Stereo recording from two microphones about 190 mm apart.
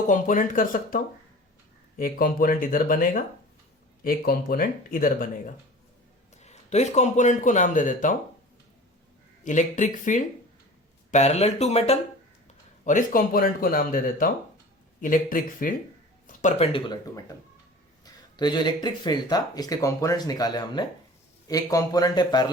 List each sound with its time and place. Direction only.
0.1 s speech: 45° left (ahead or behind)
6.3 s speech: 35° left (ahead or behind)
9.4 s speech: 40° left (ahead or behind); by 22.4 s 20° left (ahead or behind)